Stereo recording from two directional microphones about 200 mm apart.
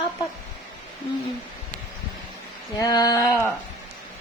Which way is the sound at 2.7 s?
20° left (ahead or behind).